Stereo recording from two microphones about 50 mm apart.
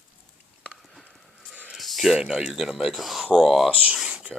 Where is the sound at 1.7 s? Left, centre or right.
Centre.